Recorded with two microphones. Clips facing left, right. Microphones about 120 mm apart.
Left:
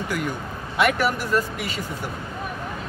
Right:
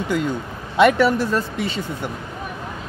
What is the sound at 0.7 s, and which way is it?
Speech, 25° right (ahead or behind).